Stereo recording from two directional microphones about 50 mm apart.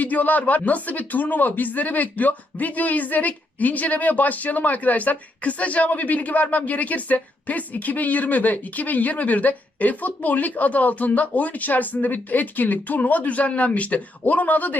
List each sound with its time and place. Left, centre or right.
0.0 s speech: left